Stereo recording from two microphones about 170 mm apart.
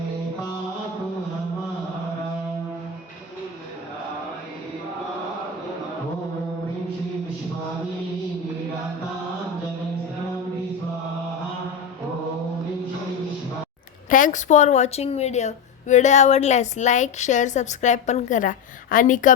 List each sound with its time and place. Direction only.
14.1 s a woman's voice: 50° left (ahead or behind)